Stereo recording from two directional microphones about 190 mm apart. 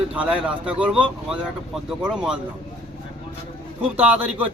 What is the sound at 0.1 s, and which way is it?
A man's voice, 5° right (ahead or behind).